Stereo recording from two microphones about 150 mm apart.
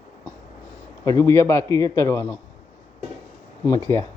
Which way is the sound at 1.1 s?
20° left (ahead or behind).